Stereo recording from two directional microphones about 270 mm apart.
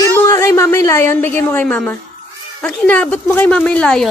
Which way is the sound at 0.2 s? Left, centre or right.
Centre.